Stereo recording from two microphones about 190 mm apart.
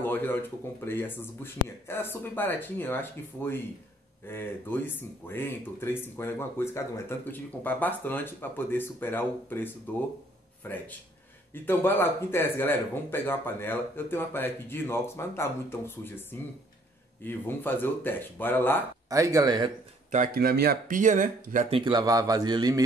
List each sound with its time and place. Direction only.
0.0 s speech: 10° left (ahead or behind)
19.0 s speech: 15° right (ahead or behind)
20.1 s speech: 50° right (ahead or behind)
21.7 s a man's voice: 25° right (ahead or behind)